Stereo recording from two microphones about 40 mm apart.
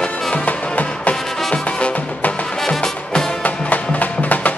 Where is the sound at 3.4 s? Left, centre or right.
Left.